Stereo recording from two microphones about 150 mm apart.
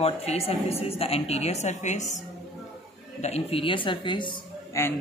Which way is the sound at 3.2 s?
45° left (ahead or behind).